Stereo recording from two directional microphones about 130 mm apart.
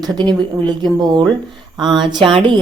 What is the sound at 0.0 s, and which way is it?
A woman's voice, 35° right (ahead or behind).